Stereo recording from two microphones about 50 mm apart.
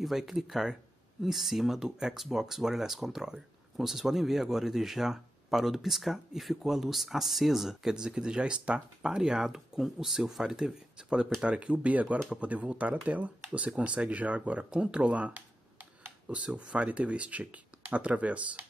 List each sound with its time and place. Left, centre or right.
0.0 s speech: centre
7.9 s speech: centre